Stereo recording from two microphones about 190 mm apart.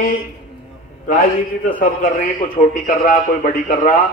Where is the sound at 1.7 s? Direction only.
50° left (ahead or behind).